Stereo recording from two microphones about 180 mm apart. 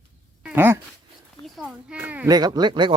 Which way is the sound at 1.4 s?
Centre (ahead or behind).